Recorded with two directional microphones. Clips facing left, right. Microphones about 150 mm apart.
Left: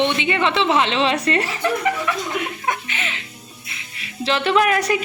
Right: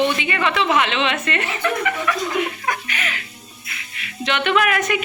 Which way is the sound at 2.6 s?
25° left (ahead or behind).